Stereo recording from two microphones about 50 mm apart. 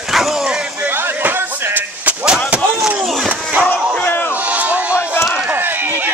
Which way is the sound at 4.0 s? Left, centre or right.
Left.